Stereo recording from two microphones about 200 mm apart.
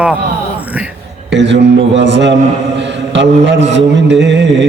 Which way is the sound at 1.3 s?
65° right (ahead or behind).